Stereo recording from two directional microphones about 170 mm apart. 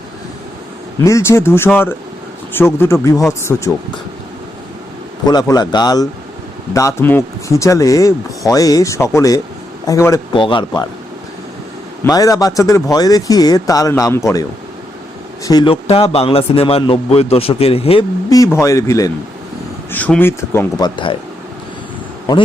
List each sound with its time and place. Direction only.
1.0 s speech: 15° left (ahead or behind)
5.2 s speech: 25° left (ahead or behind)
10.3 s speech: 30° left (ahead or behind)
12.0 s speech: 20° left (ahead or behind)
15.4 s speech: 25° left (ahead or behind)
18.3 s speech: 20° left (ahead or behind)